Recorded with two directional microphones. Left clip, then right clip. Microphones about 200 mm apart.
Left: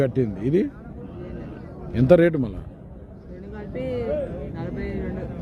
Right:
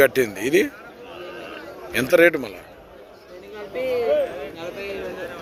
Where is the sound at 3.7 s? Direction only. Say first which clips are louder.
Right 5 dB; 15° right (ahead or behind).